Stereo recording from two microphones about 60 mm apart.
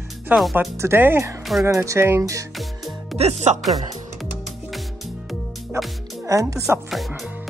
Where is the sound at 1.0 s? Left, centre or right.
Right.